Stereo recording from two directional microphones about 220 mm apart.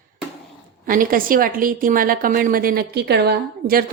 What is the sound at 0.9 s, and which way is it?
A woman's voice, 40° right (ahead or behind).